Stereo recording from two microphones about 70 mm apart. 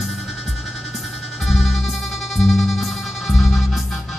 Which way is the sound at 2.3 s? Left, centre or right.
Centre.